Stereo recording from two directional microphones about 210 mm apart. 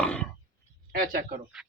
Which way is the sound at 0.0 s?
5° left (ahead or behind).